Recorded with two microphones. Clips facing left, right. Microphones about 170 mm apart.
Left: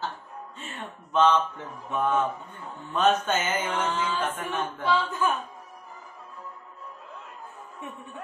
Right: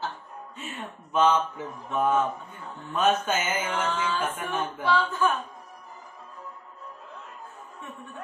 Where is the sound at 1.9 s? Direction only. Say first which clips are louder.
Right 1 dB; 10° right (ahead or behind).